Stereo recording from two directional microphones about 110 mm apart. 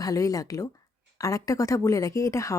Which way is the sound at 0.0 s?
30° left (ahead or behind).